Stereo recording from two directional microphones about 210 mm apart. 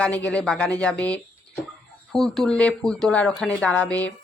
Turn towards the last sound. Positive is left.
turn(degrees=5)  # may be behind; listen again after turning